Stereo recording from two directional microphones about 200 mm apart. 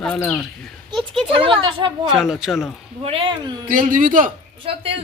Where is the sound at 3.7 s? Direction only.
40° right (ahead or behind).